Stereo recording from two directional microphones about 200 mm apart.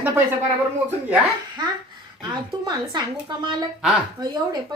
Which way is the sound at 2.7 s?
20° right (ahead or behind).